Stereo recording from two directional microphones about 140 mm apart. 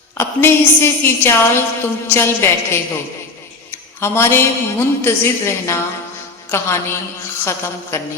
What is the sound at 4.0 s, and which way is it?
A woman's voice, 20° left (ahead or behind).